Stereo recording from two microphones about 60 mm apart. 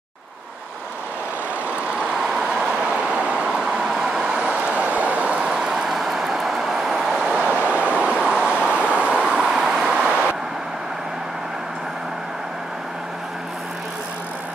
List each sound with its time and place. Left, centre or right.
2.0 s vehicle: centre
7.3 s vehicle: right